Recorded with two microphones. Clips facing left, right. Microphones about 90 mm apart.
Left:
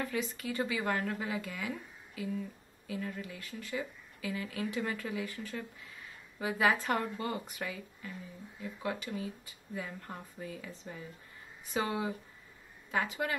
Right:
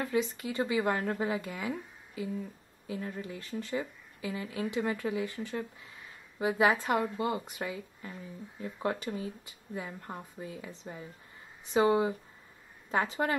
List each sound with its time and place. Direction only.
0.0 s speech: 20° right (ahead or behind)
8.5 s a woman's voice: 35° right (ahead or behind)